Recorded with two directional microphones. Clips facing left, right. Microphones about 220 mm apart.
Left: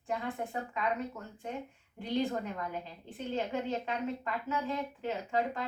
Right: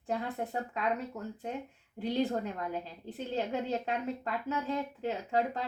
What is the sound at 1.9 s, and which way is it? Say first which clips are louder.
Speech: right 2 dB; 40° right (ahead or behind).